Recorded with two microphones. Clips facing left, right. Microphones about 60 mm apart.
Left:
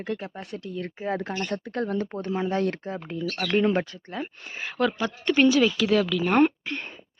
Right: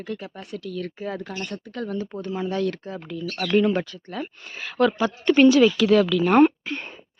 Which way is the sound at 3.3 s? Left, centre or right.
Centre.